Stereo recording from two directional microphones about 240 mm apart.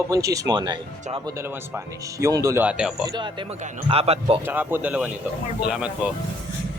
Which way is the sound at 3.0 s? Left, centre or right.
Centre.